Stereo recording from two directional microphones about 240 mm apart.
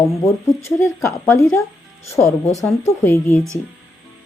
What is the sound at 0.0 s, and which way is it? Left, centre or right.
A woman's voice, centre.